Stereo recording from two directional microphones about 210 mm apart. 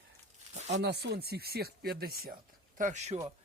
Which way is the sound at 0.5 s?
35° right (ahead or behind).